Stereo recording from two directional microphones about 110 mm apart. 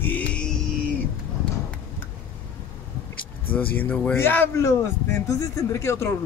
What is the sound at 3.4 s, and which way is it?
Speech, 15° left (ahead or behind).